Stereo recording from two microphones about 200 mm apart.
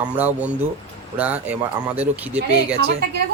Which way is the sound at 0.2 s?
10° right (ahead or behind).